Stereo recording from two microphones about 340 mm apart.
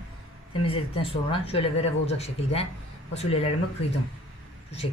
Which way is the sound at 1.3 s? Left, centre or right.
Centre.